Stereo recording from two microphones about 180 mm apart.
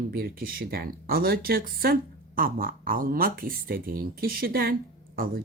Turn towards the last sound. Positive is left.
turn(degrees=-55)  # may be behind; listen again after turning